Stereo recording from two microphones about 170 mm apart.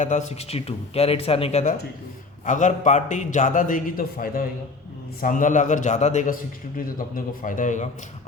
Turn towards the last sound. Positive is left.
turn(degrees=50)  # may be behind; listen again after turning